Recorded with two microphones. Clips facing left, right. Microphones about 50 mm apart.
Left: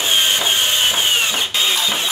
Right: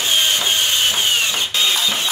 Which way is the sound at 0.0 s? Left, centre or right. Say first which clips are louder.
Left 1 dB; centre.